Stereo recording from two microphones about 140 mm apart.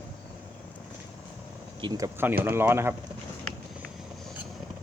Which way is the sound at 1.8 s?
25° right (ahead or behind).